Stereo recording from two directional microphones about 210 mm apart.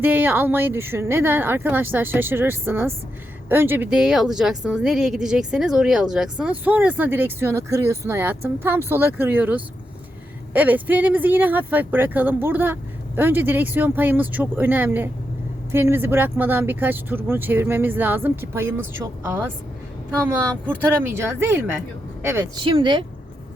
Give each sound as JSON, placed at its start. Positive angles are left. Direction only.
{"t": 0.0, "sound": "a woman's voice", "side_deg": -10}
{"t": 22.6, "sound": "speech", "side_deg": -25}